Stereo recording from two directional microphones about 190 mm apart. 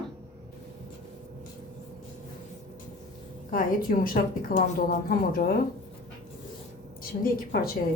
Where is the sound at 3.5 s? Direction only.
45° left (ahead or behind).